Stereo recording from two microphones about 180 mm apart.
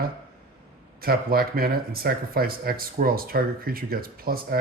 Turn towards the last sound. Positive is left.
turn(degrees=-55)  # may be behind; listen again after turning